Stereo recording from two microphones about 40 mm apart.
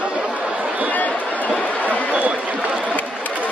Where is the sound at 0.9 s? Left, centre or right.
Left.